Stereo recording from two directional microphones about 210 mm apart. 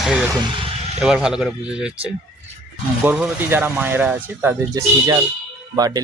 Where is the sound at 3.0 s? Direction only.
5° right (ahead or behind).